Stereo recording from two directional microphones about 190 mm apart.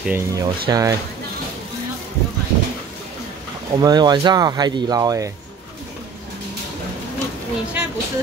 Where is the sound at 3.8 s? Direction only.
20° right (ahead or behind).